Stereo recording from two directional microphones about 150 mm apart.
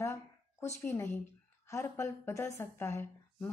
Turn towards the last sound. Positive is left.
turn(degrees=15)  # may be behind; listen again after turning